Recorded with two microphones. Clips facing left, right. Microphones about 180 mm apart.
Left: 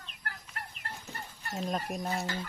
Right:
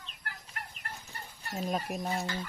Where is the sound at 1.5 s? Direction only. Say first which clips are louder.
Right 1 dB; centre (ahead or behind).